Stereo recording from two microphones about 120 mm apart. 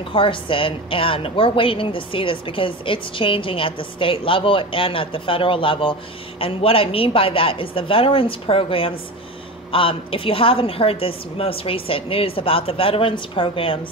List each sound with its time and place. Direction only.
0.1 s a woman's voice: 45° left (ahead or behind)